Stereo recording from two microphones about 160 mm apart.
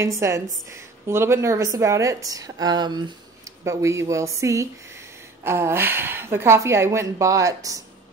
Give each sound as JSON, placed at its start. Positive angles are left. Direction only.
{"t": 0.0, "sound": "a woman's voice", "side_deg": -20}